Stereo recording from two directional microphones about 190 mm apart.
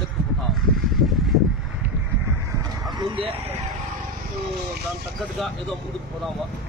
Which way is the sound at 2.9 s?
25° right (ahead or behind).